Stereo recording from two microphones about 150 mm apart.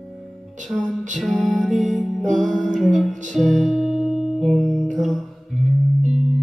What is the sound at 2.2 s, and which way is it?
Music, 55° right (ahead or behind).